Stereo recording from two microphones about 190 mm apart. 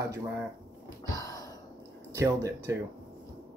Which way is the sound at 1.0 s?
20° left (ahead or behind).